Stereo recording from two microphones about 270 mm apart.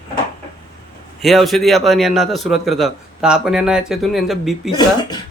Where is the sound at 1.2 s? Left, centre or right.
Centre.